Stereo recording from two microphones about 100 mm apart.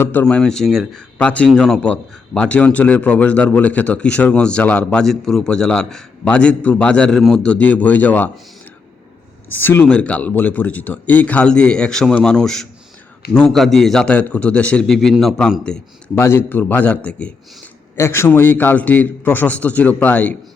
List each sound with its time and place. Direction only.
0.0 s a man's voice: 20° left (ahead or behind)
9.5 s speech: 20° left (ahead or behind)
9.8 s a man's voice: 10° left (ahead or behind)
16.1 s a man's voice: 25° left (ahead or behind)
17.9 s a man's voice: 25° left (ahead or behind)